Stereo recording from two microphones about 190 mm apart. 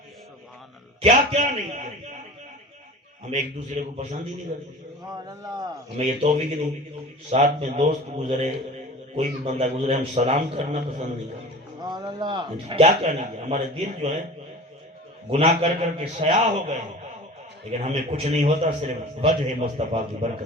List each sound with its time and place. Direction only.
1.0 s a man's voice: 35° right (ahead or behind)
3.2 s a man's voice: 40° right (ahead or behind)
5.1 s speech: 20° right (ahead or behind)
6.0 s a man's voice: 35° right (ahead or behind)
11.8 s a man's voice: 20° right (ahead or behind); by 14.2 s 35° right (ahead or behind)
15.3 s a man's voice: 35° right (ahead or behind)